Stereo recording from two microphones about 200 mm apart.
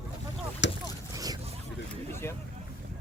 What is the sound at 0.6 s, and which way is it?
Rowboat, 65° left (ahead or behind).